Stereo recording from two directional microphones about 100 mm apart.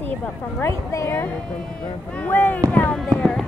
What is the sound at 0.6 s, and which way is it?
Speech, 30° left (ahead or behind).